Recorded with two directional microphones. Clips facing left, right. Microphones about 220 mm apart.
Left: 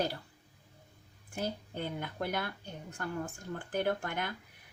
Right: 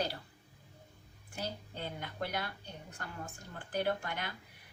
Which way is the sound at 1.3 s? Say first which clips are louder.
Left 5 dB; 50° left (ahead or behind).